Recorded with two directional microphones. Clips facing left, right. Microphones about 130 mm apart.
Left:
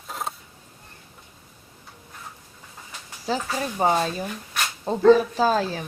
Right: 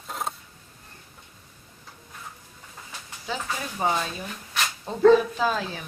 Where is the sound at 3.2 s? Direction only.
35° left (ahead or behind).